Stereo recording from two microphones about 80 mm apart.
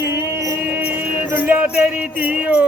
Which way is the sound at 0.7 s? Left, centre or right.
Right.